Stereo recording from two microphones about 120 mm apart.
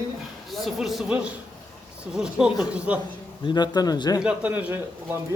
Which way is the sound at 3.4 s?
40° left (ahead or behind).